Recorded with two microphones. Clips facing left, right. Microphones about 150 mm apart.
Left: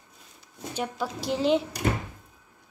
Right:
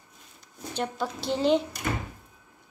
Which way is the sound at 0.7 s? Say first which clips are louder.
Even; 5° left (ahead or behind).